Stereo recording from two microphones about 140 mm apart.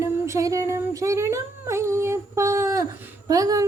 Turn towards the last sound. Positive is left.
turn(degrees=-25)  # may be behind; listen again after turning